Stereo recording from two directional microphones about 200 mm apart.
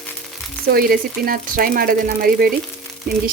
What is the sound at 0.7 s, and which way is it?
Speech, 50° right (ahead or behind).